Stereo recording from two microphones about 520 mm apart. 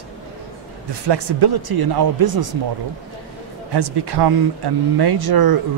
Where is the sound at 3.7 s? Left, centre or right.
Right.